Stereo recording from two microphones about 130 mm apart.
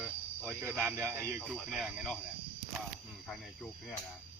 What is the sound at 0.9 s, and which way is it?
Speech, 15° right (ahead or behind).